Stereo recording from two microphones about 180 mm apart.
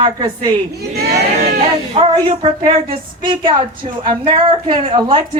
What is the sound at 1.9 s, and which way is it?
A woman's voice, 25° right (ahead or behind).